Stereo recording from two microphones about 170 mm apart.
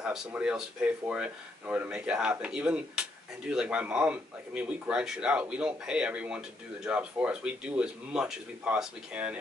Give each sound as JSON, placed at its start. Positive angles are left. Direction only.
{"t": 0.0, "sound": "speech", "side_deg": -5}